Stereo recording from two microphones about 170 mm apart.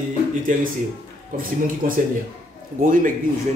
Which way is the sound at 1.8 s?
55° right (ahead or behind).